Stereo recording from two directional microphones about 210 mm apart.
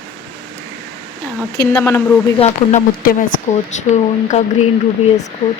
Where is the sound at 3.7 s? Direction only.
35° left (ahead or behind).